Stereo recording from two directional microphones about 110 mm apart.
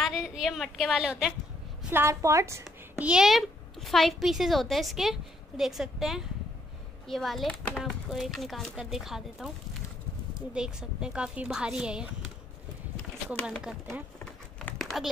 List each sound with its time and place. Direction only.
0.0 s a woman's voice: centre (ahead or behind)
1.9 s a woman's voice: 25° right (ahead or behind)
3.0 s a child's voice: 10° right (ahead or behind)
10.5 s a woman's voice: 5° right (ahead or behind)
14.8 s typing: centre (ahead or behind)